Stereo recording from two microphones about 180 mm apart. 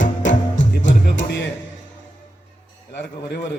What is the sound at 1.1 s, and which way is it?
Music, 80° left.